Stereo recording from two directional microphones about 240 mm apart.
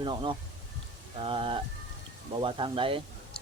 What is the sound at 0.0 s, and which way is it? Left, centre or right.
Speech, centre.